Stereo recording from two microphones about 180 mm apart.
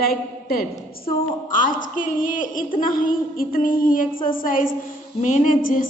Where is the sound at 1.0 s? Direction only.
45° left (ahead or behind).